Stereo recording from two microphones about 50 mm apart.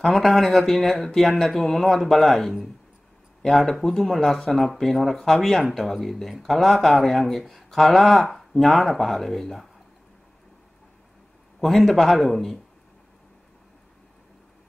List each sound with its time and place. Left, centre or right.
0.0 s speech: centre
11.6 s speech: centre